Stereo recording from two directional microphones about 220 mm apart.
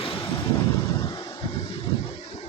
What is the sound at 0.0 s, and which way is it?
Vehicle, 25° left (ahead or behind).